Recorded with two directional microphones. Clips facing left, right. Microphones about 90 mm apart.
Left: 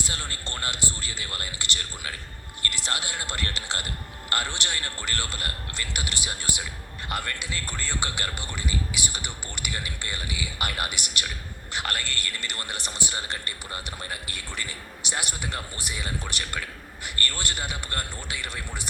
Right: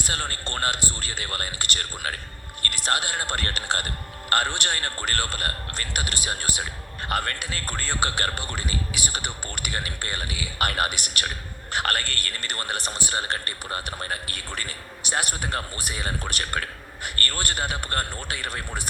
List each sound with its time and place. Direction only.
0.0 s speech: 50° right (ahead or behind)